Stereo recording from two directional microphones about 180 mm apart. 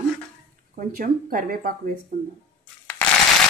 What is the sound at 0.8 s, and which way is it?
Speech, 50° right (ahead or behind).